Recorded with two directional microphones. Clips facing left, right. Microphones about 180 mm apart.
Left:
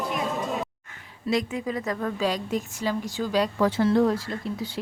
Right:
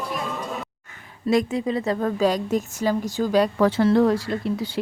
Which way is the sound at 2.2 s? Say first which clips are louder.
Right 5 dB; 45° right (ahead or behind).